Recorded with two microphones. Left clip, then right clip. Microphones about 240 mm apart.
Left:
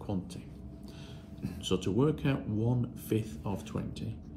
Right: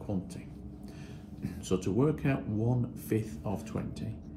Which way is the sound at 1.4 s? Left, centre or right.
Centre.